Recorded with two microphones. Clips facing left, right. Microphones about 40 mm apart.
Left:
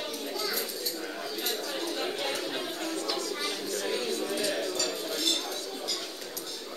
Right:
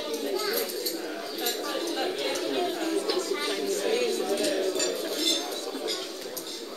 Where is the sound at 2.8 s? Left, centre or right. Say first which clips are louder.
Right 5 dB; right.